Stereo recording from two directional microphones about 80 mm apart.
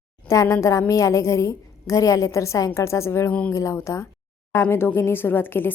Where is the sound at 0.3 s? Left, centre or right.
Left.